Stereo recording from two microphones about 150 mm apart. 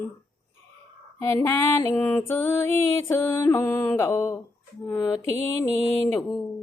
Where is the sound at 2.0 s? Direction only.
10° left (ahead or behind).